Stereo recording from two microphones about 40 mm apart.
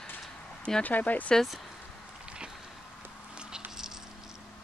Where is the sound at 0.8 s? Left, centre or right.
Left.